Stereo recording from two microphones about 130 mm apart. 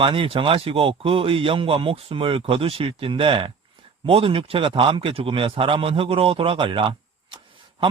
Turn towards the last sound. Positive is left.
turn(degrees=-40)  # may be behind; listen again after turning